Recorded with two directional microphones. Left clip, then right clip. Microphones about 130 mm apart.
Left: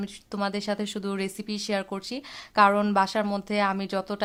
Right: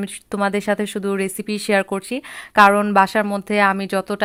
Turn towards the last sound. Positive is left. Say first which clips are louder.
# right 8 dB
turn(degrees=-20)  # may be behind; listen again after turning